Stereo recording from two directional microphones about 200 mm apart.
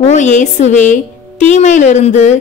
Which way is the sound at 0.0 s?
35° left (ahead or behind).